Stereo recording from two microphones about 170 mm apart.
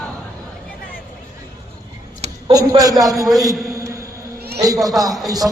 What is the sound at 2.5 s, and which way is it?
Speech, 20° right (ahead or behind).